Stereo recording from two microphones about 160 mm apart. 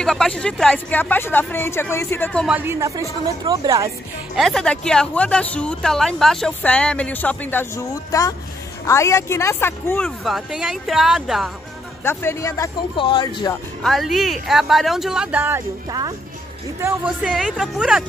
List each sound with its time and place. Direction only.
0.0 s speech: 5° left (ahead or behind)
2.4 s speech: 10° right (ahead or behind)
4.4 s speech: 5° left (ahead or behind)
10.0 s speech: centre (ahead or behind)
12.0 s speech: 15° left (ahead or behind)
12.9 s speech: 30° left (ahead or behind)
13.8 s speech: centre (ahead or behind)
15.9 s speech: 25° right (ahead or behind)
17.0 s speech: 5° right (ahead or behind)